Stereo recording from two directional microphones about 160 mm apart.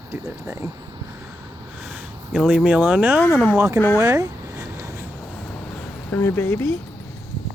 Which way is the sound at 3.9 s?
20° right (ahead or behind).